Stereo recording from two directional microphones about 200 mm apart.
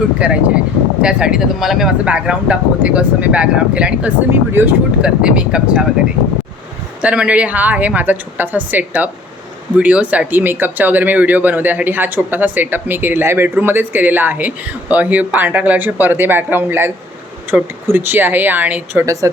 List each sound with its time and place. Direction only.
0.2 s speech: 5° right (ahead or behind)
7.0 s speech: 5° right (ahead or behind)